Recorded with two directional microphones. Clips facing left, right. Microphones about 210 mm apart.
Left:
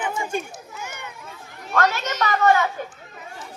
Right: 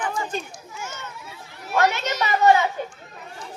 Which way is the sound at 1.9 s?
10° right (ahead or behind).